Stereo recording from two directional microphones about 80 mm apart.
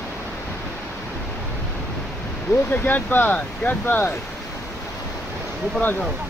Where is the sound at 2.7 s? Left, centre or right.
Left.